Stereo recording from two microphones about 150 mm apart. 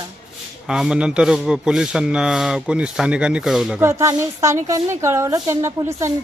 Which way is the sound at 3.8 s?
20° right (ahead or behind).